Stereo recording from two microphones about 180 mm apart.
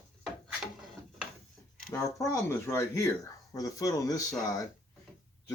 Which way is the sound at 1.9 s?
15° left (ahead or behind).